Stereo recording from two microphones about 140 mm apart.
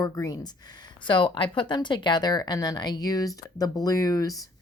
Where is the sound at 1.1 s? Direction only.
35° left (ahead or behind).